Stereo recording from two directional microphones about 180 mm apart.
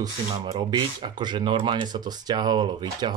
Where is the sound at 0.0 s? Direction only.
20° right (ahead or behind).